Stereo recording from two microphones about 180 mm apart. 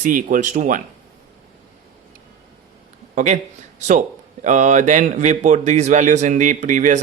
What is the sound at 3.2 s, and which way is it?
A man's voice, 40° right (ahead or behind).